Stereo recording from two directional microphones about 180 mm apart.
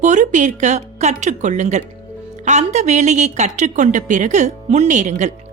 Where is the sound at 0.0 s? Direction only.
40° right (ahead or behind).